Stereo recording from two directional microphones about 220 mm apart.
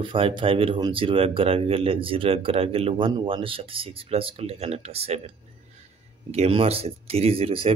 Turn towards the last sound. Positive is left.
turn(degrees=-25)  # may be behind; listen again after turning